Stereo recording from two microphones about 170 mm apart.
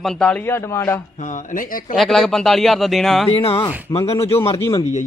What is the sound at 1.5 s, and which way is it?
Speech, 55° left (ahead or behind).